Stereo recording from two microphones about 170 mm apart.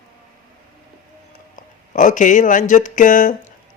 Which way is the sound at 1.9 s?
50° left (ahead or behind).